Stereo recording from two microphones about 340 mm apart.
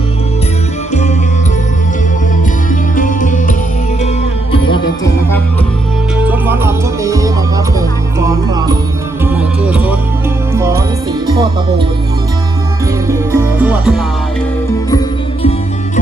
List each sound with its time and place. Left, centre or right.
2.9 s music: left
4.7 s music: centre
6.2 s music: centre
13.1 s music: centre